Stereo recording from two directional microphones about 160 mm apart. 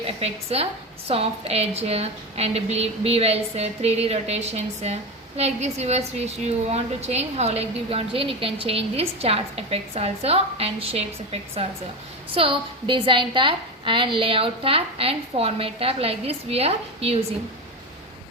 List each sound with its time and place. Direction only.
0.0 s a woman's voice: 40° right (ahead or behind)